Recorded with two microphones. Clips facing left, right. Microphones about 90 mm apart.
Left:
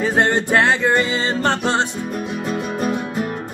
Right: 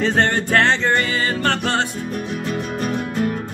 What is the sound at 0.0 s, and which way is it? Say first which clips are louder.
Music: left 1 dB; 15° left (ahead or behind).